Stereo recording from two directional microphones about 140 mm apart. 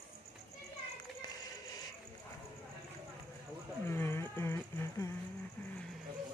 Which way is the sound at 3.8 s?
15° left (ahead or behind).